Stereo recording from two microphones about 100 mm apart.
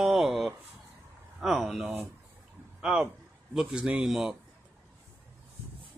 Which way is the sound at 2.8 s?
10° right (ahead or behind).